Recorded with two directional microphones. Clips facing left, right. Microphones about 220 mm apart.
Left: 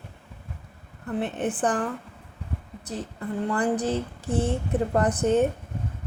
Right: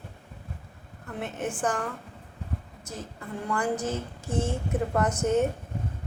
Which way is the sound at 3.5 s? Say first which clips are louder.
Left 3 dB; 35° left (ahead or behind).